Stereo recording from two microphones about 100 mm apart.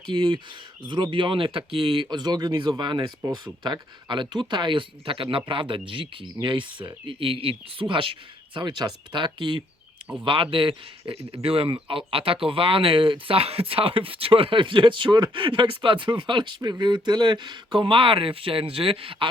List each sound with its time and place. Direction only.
0.1 s speech: 55° right (ahead or behind)